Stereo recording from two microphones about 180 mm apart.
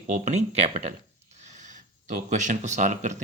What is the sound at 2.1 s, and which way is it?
Speech, 45° right (ahead or behind).